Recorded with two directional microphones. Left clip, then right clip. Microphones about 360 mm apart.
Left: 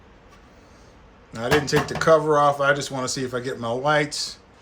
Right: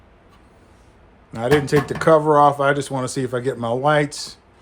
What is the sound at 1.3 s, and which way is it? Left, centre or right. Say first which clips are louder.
Speech: right 3 dB; centre.